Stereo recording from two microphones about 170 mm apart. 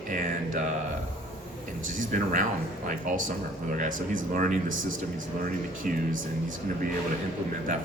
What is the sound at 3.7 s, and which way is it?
Speech, 50° right (ahead or behind).